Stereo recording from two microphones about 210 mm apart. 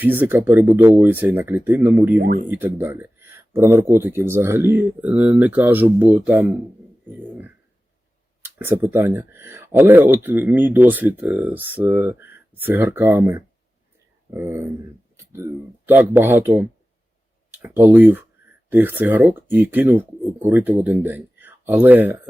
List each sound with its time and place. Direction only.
0.0 s speech: 10° right (ahead or behind)
2.1 s speech: 40° right (ahead or behind)
2.5 s speech: 10° right (ahead or behind)
8.4 s speech: 10° right (ahead or behind)
15.1 s a sound: 10° right (ahead or behind)
15.9 s speech: 10° right (ahead or behind)